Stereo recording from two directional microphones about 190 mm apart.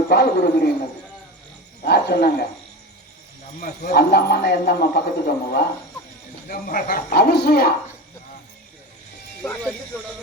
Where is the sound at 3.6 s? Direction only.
50° left (ahead or behind).